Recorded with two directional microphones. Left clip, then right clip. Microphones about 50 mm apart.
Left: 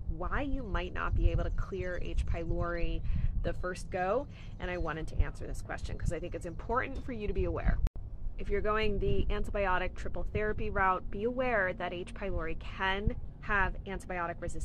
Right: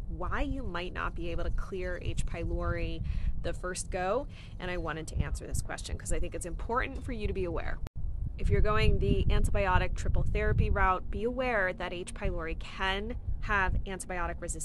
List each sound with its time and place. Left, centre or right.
0.2 s speech: right